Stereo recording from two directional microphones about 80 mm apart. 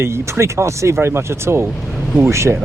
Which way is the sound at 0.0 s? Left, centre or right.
Right.